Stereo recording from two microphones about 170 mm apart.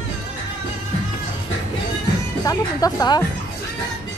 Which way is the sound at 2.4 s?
20° left (ahead or behind).